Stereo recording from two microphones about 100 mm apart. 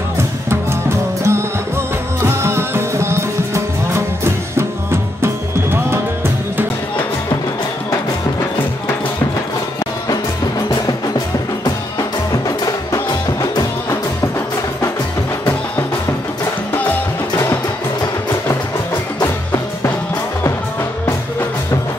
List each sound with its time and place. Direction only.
0.5 s music: 25° right (ahead or behind)
12.4 s music: 40° left (ahead or behind)